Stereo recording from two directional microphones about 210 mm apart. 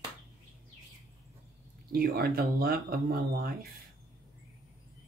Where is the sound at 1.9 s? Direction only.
45° right (ahead or behind).